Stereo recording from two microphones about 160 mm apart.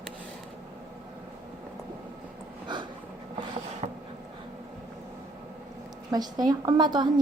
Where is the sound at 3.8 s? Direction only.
45° right (ahead or behind).